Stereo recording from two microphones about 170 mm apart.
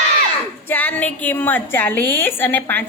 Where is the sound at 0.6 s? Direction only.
10° left (ahead or behind).